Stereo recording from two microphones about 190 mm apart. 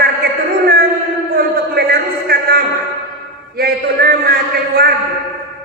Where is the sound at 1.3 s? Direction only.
55° right (ahead or behind).